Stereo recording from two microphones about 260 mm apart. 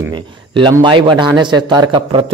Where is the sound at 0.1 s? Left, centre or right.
Centre.